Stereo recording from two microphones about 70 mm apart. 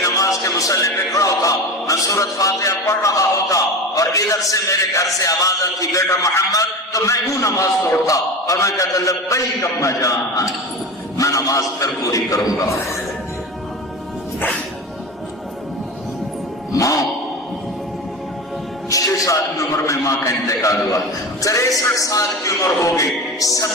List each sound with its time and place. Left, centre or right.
0.0 s a sound: left
1.1 s music: left
2.0 s a man's voice: left
16.7 s music: left
18.9 s a man's voice: left